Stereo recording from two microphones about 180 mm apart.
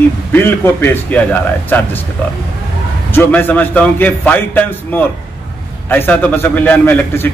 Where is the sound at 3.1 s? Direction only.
10° left (ahead or behind).